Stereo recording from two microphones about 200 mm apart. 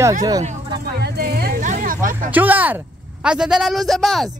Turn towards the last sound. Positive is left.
turn(degrees=0)  # may be behind; listen again after turning